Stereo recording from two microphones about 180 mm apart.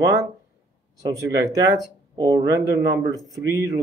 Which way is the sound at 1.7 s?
20° right (ahead or behind).